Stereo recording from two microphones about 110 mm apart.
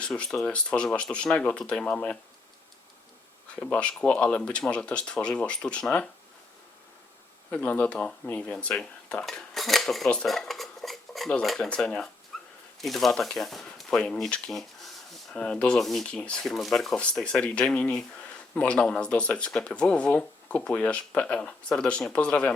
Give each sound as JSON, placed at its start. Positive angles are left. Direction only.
{"t": 0.0, "sound": "speech", "side_deg": 5}
{"t": 3.5, "sound": "speech", "side_deg": 15}
{"t": 7.5, "sound": "speech", "side_deg": 15}